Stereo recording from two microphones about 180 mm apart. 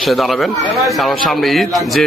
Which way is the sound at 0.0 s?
Centre (ahead or behind).